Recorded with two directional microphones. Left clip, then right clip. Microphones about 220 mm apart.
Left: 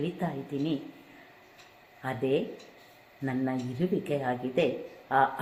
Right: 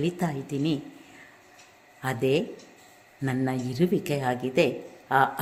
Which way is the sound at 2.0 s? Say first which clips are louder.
Right 4 dB; 50° right (ahead or behind).